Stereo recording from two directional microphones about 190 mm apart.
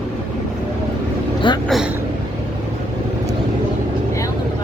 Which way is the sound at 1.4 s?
25° left (ahead or behind).